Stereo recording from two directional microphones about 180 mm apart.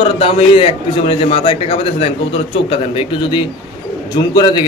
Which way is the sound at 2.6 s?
30° left (ahead or behind).